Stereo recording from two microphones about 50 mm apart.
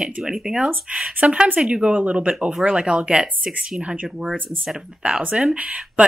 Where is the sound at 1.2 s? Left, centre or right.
Right.